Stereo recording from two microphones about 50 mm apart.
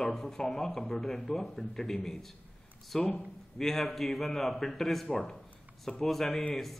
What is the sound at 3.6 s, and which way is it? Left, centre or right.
A man's voice, centre.